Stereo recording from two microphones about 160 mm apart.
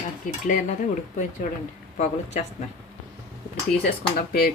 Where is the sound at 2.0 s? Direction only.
45° left (ahead or behind).